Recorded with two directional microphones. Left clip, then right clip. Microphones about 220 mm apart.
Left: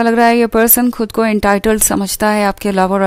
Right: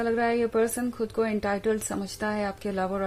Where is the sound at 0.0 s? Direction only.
45° left (ahead or behind).